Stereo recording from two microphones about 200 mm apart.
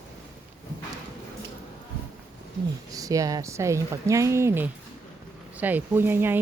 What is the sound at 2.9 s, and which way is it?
A woman's voice, 15° right (ahead or behind).